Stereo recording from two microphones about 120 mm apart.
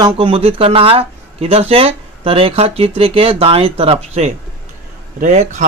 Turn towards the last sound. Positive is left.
turn(degrees=-75)  # may be behind; listen again after turning